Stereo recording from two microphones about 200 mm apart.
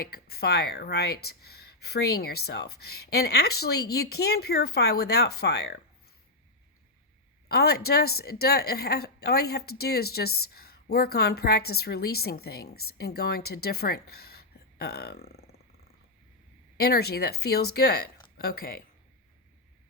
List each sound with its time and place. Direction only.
0.0 s speech: 50° left (ahead or behind)
7.4 s a woman's voice: 50° left (ahead or behind)
16.7 s speech: 50° left (ahead or behind)